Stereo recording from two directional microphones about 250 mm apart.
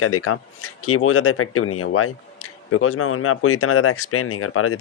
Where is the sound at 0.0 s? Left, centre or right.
Left.